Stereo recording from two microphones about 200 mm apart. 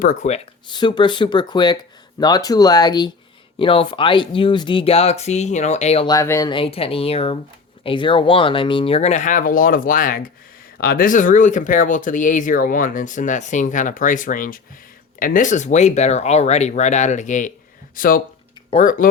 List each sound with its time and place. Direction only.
0.0 s speech: 40° left (ahead or behind)
6.1 s speech: 15° left (ahead or behind); by 19.0 s 40° left (ahead or behind)